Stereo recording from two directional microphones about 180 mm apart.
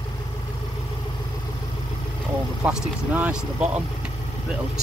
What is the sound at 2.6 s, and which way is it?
Speech, 5° right (ahead or behind).